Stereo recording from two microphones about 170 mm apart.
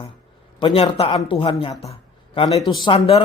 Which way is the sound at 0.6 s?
30° left (ahead or behind).